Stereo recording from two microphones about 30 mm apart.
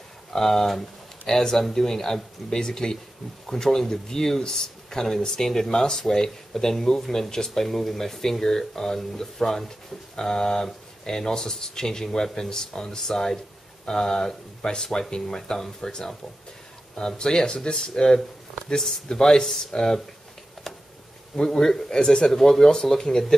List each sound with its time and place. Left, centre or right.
0.3 s speech: centre
17.2 s speech: left
20.7 s a sound: centre
21.5 s speech: centre